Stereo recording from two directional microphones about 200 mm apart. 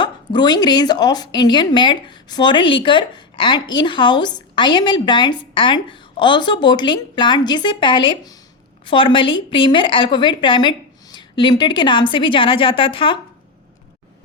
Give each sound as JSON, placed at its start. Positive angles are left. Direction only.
{"t": 0.0, "sound": "speech", "side_deg": 20}